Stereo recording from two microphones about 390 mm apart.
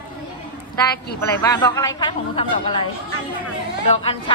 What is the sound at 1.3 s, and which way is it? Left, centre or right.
Speech, centre.